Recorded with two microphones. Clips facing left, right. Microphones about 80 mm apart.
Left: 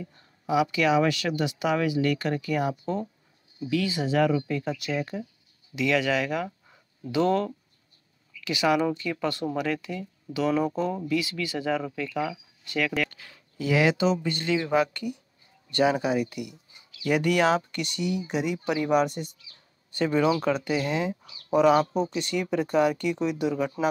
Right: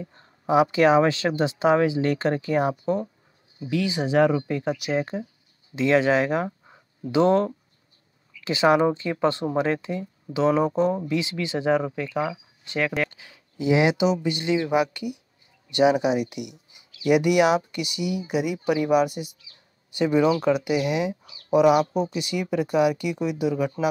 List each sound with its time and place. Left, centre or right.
0.0 s speech: right; by 23.7 s centre